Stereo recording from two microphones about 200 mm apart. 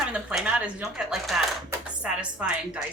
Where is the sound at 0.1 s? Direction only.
5° right (ahead or behind).